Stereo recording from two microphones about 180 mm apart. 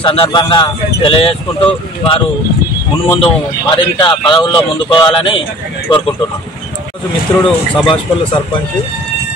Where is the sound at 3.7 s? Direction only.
25° left (ahead or behind).